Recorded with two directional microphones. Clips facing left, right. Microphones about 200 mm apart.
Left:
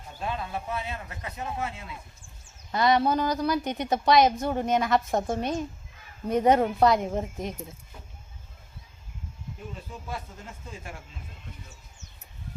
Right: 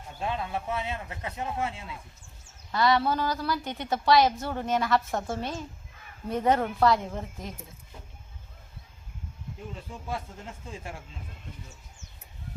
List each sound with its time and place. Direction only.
0.2 s a man's voice: 20° right (ahead or behind)
2.7 s a woman's voice: 20° left (ahead or behind)
10.1 s a man's voice: 30° right (ahead or behind)